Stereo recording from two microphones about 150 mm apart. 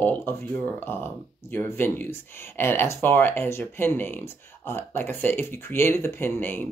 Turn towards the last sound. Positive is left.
turn(degrees=10)  # may be behind; listen again after turning